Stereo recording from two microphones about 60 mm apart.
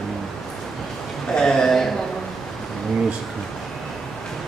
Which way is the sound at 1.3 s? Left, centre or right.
Centre.